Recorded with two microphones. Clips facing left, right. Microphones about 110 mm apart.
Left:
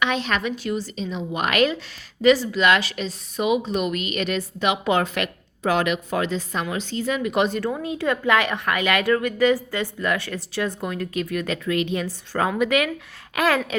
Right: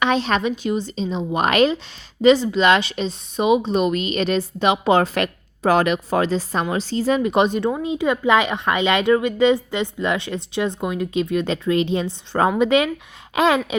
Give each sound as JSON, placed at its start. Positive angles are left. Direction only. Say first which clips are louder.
{"t": 0.0, "sound": "a woman's voice", "louder": "right 4 dB", "side_deg": -30}